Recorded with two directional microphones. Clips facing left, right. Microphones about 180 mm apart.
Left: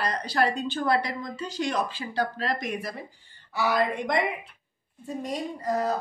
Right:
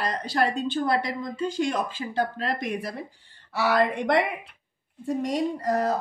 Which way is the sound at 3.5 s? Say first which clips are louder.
Right 2 dB; 85° right.